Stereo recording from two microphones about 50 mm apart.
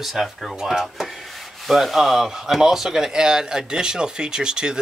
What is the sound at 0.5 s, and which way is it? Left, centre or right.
Speech, centre.